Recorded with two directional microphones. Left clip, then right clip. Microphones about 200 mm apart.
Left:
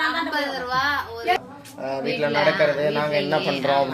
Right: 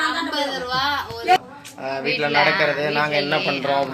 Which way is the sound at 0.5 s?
10° left (ahead or behind).